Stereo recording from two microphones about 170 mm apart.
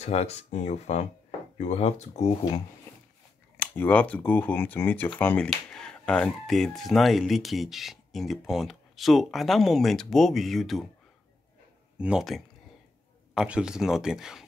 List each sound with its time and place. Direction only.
0.0 s speech: 40° left (ahead or behind)
3.5 s speech: 10° left (ahead or behind)
12.0 s speech: 5° right (ahead or behind)